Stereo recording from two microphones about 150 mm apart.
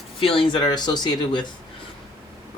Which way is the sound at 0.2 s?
35° left (ahead or behind).